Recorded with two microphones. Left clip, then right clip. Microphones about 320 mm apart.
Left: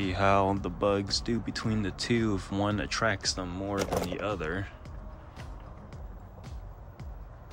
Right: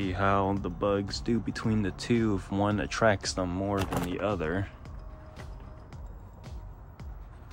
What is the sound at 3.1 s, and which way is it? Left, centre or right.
Speech, centre.